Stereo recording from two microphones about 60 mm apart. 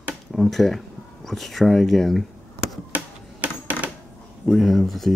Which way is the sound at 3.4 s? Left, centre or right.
Right.